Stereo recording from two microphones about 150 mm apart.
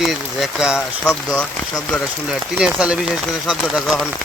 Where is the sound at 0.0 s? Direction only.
Centre (ahead or behind).